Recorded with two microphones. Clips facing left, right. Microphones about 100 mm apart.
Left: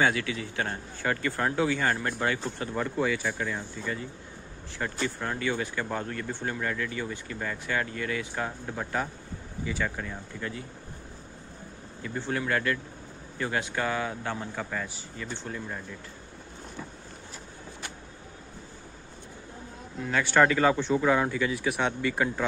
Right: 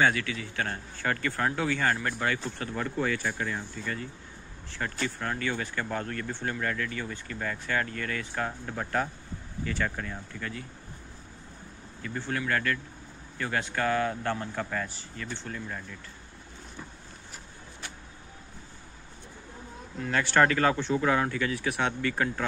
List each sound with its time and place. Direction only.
0.1 s speech: 20° left (ahead or behind)
2.8 s speech: 5° left (ahead or behind)
4.7 s speech: 15° left (ahead or behind)
12.0 s speech: 20° left (ahead or behind)
20.1 s speech: 5° left (ahead or behind)